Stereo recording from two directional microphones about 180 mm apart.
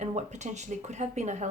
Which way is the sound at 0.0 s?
40° right (ahead or behind).